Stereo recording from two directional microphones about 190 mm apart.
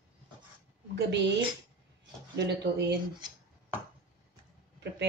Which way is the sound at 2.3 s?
65° right (ahead or behind).